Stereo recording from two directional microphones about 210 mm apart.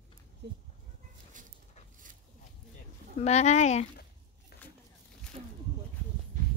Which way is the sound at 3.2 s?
30° left (ahead or behind).